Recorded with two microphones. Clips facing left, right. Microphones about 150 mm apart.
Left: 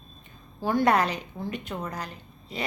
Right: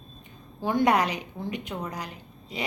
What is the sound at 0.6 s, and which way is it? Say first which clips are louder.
A woman's voice: even; 20° right (ahead or behind).